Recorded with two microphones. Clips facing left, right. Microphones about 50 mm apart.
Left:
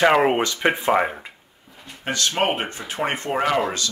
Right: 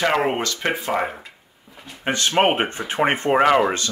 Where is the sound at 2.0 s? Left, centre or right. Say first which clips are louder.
Right 4 dB; right.